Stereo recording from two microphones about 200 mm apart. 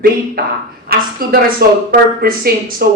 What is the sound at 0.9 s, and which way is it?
A woman's voice, 50° right (ahead or behind).